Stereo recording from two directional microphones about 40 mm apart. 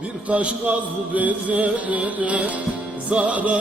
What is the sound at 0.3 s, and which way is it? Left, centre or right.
Music, right.